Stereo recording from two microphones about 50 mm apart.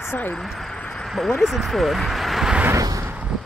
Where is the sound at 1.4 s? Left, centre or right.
Centre.